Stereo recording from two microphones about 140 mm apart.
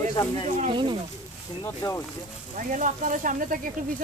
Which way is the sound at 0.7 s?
35° right (ahead or behind).